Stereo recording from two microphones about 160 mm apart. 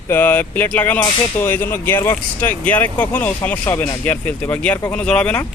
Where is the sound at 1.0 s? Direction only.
25° left (ahead or behind).